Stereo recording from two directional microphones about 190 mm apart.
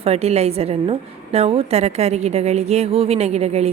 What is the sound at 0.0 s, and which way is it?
A woman's voice, 30° right (ahead or behind).